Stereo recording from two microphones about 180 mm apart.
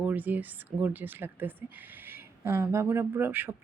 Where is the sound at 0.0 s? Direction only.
10° right (ahead or behind).